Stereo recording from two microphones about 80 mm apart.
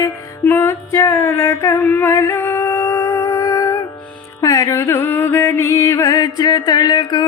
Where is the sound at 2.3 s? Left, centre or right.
Left.